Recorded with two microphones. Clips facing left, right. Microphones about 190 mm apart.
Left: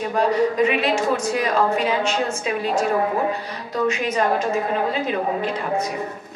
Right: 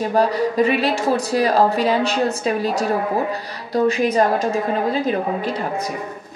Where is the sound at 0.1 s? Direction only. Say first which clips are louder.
Left 1 dB; 35° right (ahead or behind).